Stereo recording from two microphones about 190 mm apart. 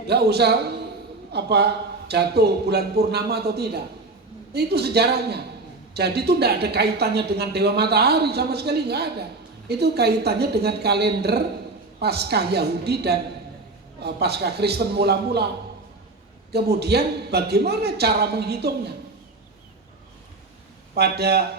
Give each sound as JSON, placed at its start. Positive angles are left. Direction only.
{"t": 0.1, "sound": "speech", "side_deg": -60}
{"t": 16.5, "sound": "speech", "side_deg": -60}
{"t": 20.9, "sound": "speech", "side_deg": -60}